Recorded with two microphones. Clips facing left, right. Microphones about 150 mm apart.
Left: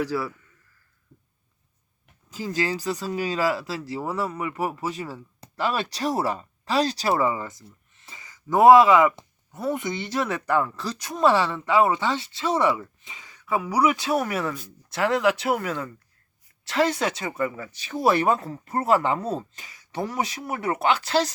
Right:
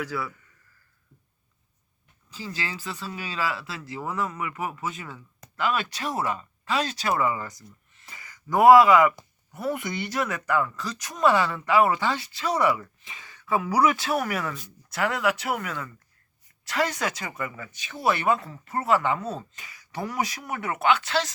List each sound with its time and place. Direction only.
0.0 s speech: 35° left (ahead or behind)
2.3 s speech: 45° left (ahead or behind)